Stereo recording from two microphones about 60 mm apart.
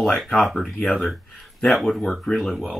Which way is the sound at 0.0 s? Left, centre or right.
Centre.